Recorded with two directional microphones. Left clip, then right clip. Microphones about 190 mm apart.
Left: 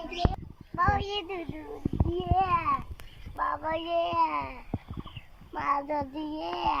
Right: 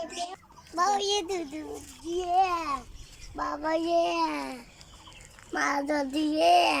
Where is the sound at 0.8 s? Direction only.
20° right (ahead or behind).